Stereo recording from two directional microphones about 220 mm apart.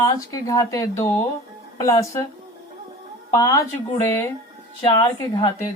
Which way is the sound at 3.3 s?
15° left (ahead or behind).